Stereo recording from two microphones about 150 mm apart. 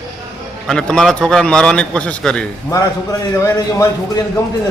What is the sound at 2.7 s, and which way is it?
A man's voice, 25° left (ahead or behind).